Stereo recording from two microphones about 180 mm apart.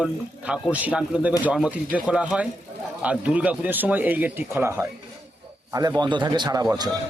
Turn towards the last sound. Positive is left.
turn(degrees=-20)  # may be behind; listen again after turning